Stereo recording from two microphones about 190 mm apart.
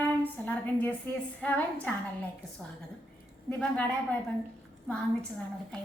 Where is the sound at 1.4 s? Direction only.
10° left (ahead or behind).